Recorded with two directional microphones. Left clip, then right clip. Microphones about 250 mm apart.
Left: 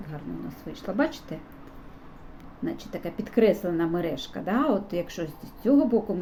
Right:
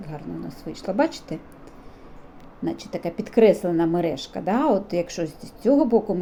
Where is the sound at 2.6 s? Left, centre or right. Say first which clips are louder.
Right 5 dB; centre.